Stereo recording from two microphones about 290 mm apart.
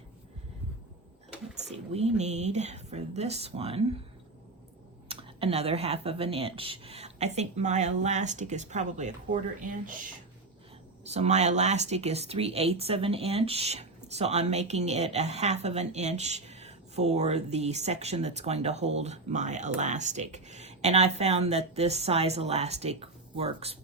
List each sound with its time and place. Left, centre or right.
1.6 s speech: right
5.0 s speech: centre
11.0 s speech: right